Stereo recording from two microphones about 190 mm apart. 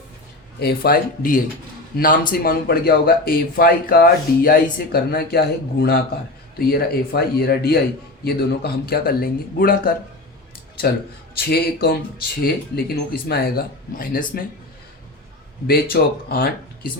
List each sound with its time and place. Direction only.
0.6 s a man's voice: 55° left (ahead or behind)
11.3 s a man's voice: 55° left (ahead or behind)
15.6 s a man's voice: 50° left (ahead or behind)